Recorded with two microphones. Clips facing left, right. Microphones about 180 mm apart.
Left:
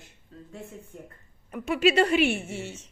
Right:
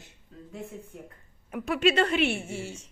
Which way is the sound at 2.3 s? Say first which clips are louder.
Left 1 dB; 30° right (ahead or behind).